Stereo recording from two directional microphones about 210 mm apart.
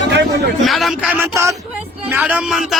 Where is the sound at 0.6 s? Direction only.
Centre (ahead or behind).